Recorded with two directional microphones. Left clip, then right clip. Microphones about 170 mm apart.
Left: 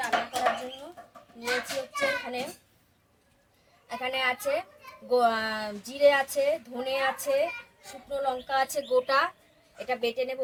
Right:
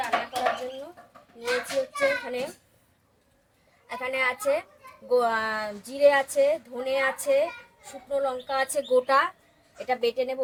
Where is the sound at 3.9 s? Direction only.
20° right (ahead or behind).